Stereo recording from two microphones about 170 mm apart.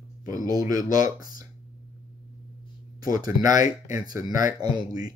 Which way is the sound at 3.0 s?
20° right (ahead or behind).